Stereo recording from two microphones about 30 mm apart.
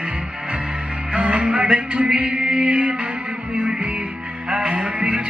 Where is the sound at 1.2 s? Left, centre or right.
Right.